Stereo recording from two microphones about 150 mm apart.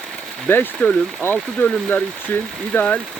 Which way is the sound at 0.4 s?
10° left (ahead or behind).